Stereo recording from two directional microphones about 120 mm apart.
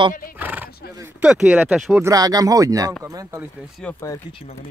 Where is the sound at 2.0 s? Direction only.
30° right (ahead or behind).